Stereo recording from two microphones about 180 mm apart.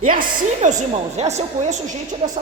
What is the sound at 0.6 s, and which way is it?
A man's voice, 45° right (ahead or behind).